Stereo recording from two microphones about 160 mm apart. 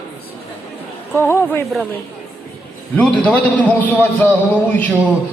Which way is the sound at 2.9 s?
10° left (ahead or behind).